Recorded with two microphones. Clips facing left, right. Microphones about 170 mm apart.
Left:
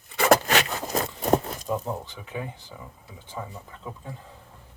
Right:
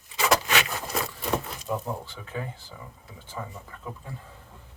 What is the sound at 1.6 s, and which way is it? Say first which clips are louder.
Speech: left 2 dB; 15° left (ahead or behind).